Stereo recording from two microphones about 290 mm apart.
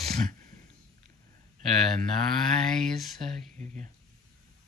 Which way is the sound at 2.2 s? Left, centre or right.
Centre.